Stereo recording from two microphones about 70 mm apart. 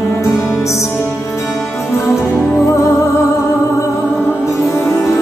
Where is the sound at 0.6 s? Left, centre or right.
Left.